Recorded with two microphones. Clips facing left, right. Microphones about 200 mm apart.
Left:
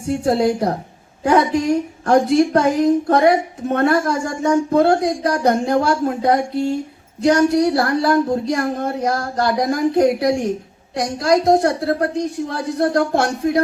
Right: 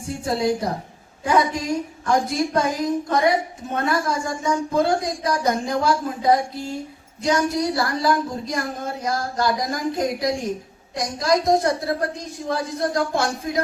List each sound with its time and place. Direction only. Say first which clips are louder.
0.1 s a woman's voice: left 6 dB; 60° left (ahead or behind)